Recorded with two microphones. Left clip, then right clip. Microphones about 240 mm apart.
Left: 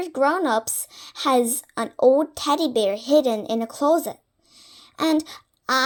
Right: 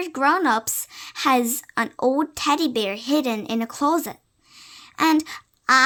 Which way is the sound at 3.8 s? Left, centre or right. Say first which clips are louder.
Left 2 dB; right.